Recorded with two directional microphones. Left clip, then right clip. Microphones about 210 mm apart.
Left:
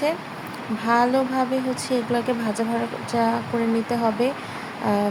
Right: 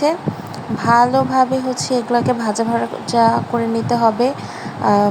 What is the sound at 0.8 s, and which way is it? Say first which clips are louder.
Speech: right 7 dB; 20° right (ahead or behind).